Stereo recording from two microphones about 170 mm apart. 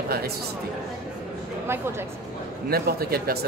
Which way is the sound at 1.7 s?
15° right (ahead or behind).